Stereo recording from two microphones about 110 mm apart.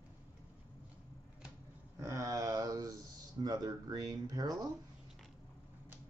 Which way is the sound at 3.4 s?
35° right (ahead or behind).